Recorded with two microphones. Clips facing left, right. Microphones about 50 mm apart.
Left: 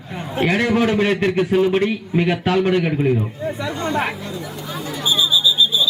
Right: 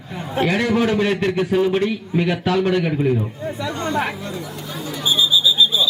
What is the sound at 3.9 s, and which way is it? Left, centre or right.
Chatter, centre.